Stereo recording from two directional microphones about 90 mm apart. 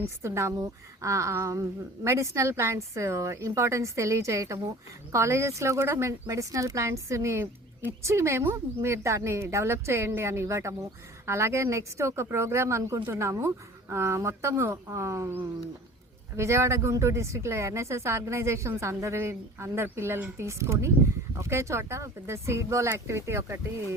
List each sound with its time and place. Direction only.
0.0 s speech: 30° right (ahead or behind)